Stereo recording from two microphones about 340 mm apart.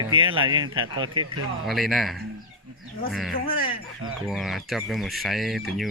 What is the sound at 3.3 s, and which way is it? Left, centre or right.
Speech, left.